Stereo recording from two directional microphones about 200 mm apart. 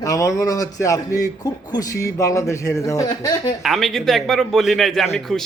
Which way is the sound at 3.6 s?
Centre (ahead or behind).